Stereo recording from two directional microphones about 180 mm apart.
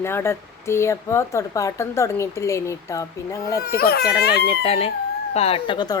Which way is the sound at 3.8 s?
60° left (ahead or behind).